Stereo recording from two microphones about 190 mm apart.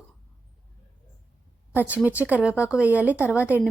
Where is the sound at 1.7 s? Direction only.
10° right (ahead or behind).